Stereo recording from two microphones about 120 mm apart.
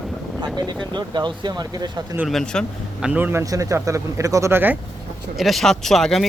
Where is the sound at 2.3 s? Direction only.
5° left (ahead or behind).